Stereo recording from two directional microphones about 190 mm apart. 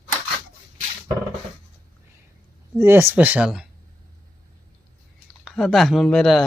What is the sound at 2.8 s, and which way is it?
Speech, 10° right (ahead or behind).